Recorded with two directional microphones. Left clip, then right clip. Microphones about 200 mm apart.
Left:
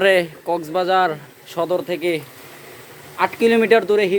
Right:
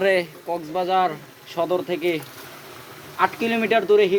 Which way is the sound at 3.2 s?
45° left (ahead or behind).